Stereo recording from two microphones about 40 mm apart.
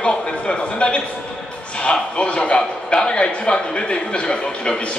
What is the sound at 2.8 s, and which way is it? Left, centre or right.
A man's voice, left.